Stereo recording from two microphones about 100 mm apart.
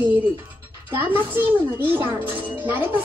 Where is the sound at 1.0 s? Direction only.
20° right (ahead or behind).